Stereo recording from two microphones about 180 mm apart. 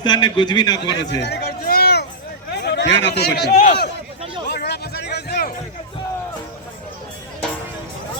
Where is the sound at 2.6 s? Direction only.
70° left (ahead or behind).